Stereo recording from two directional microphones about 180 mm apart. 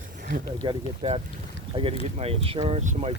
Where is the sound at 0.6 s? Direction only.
30° right (ahead or behind).